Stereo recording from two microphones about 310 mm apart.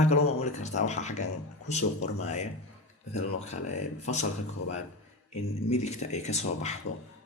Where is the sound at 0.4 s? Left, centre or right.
Left.